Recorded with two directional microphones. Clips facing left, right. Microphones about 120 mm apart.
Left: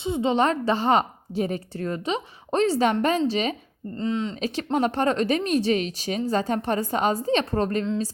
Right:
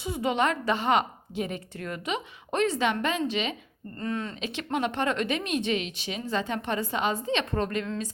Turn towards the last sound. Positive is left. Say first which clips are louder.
# left 5 dB
turn(degrees=35)  # may be behind; listen again after turning